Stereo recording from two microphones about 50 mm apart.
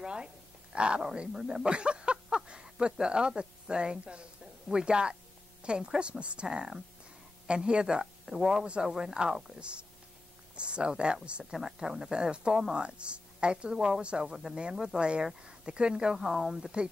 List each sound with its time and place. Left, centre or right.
0.0 s a woman's voice: centre
6.4 s speech: centre
11.5 s speech: centre